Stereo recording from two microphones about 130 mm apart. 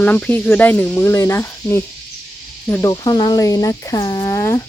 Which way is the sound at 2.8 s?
30° left (ahead or behind).